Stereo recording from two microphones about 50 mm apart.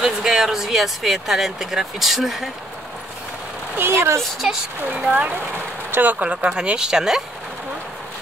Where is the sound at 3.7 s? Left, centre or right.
Right.